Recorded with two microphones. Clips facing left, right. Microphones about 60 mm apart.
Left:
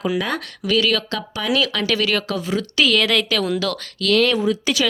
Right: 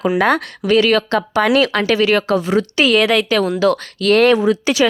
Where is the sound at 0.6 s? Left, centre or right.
Right.